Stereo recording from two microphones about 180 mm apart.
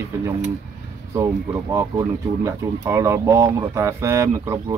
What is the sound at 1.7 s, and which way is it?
Speech, 15° right (ahead or behind).